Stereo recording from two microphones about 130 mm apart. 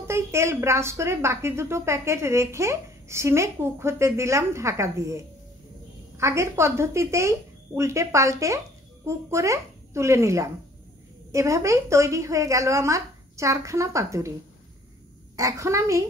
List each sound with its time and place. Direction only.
0.0 s a woman's voice: 20° right (ahead or behind)
15.3 s a woman's voice: 25° right (ahead or behind)